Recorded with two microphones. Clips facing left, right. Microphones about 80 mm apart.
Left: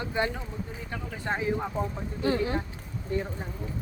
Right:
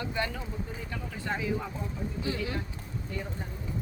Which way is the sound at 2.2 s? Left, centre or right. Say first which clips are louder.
Left 9 dB; left.